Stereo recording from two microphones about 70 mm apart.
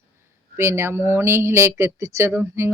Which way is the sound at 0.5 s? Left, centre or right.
Right.